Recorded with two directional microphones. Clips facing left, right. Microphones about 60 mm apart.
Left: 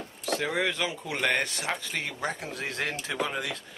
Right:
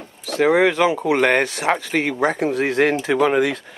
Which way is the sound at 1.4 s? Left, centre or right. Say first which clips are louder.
Right 11 dB; right.